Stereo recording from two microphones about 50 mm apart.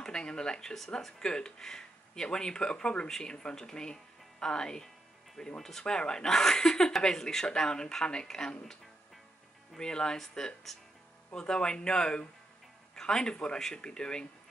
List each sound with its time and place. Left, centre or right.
0.0 s speech: centre
9.8 s speech: centre